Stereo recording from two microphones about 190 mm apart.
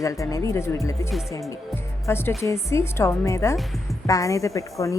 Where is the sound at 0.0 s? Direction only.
15° left (ahead or behind).